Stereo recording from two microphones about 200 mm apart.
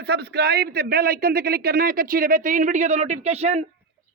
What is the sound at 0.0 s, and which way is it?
A man's voice, 55° right (ahead or behind).